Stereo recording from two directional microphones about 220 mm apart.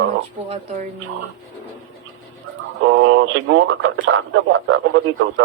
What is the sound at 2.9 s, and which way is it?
Speech, 60° right (ahead or behind).